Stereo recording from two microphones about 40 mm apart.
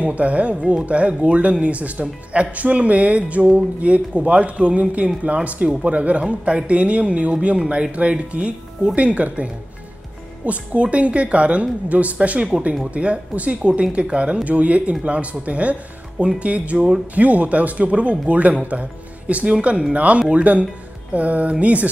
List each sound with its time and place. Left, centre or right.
0.0 s speech: right